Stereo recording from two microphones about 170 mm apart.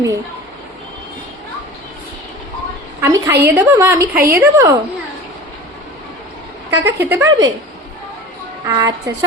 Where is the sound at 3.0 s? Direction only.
15° right (ahead or behind).